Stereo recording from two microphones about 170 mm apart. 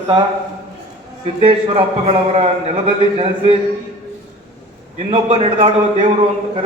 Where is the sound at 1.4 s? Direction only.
30° right (ahead or behind).